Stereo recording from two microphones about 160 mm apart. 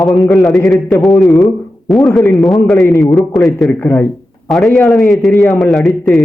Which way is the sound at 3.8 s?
15° left (ahead or behind).